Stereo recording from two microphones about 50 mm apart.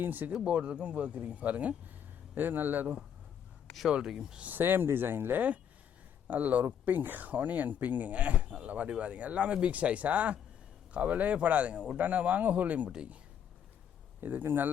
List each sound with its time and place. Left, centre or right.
0.0 s speech: right
0.4 s speech: right
2.3 s speech: right
3.8 s speech: centre
4.5 s speech: right
6.2 s speech: right; by 11.9 s centre
11.9 s speech: right
14.2 s speech: right